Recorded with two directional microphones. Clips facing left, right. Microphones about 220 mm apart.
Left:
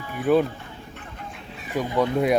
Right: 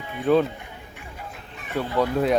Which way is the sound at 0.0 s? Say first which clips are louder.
Left 1 dB; 20° right (ahead or behind).